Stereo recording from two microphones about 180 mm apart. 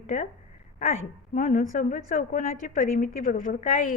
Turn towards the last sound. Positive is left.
turn(degrees=45)  # may be behind; listen again after turning